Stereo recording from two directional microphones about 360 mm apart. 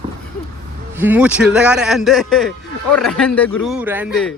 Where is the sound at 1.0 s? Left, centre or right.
Centre.